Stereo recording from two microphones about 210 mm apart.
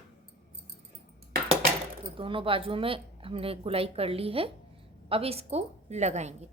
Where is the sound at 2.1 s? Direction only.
25° right (ahead or behind).